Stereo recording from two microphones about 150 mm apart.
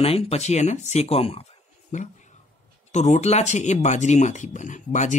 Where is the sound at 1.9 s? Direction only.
55° left (ahead or behind).